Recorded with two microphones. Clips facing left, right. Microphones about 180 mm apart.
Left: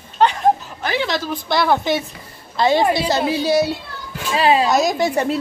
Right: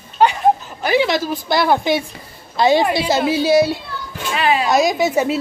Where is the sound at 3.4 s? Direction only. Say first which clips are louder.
Right 5 dB; centre (ahead or behind).